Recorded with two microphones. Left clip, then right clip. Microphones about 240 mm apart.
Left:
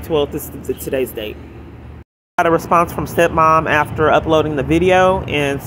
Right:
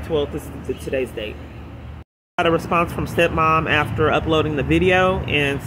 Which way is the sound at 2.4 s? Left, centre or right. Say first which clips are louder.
Left 5 dB; centre.